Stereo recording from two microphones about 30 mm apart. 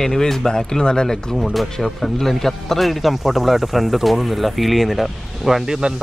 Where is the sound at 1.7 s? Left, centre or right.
Centre.